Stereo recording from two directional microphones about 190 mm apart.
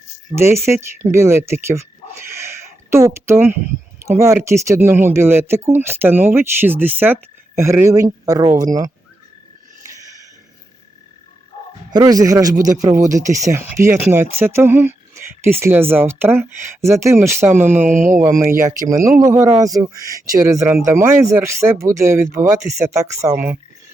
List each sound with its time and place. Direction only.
0.3 s speech: 15° right (ahead or behind)
2.2 s a sound: 15° right (ahead or behind)
4.0 s speech: 15° right (ahead or behind)
11.9 s speech: 20° right (ahead or behind)
17.8 s speech: 45° right (ahead or behind)
18.9 s speech: 15° right (ahead or behind)